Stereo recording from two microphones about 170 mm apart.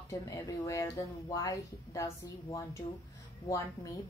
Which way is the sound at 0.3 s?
20° left (ahead or behind).